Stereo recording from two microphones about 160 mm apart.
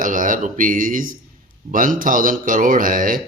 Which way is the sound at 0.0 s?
55° right (ahead or behind).